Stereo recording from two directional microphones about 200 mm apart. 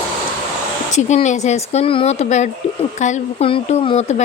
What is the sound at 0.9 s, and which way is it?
Speech, 35° left (ahead or behind).